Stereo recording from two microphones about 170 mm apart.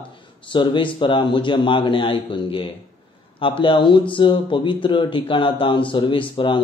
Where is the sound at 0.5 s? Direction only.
30° left (ahead or behind).